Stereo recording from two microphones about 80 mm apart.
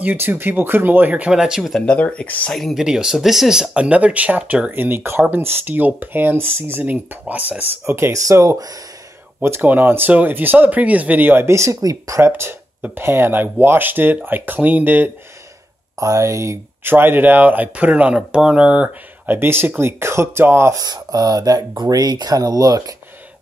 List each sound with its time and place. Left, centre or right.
0.0 s speech: right
1.3 s speech: centre
1.8 s speech: centre
2.5 s speech: centre
2.8 s speech: centre
7.8 s speech: right
9.4 s speech: right
12.8 s speech: right
16.0 s speech: right
16.8 s speech: right
19.2 s speech: right
20.7 s speech: right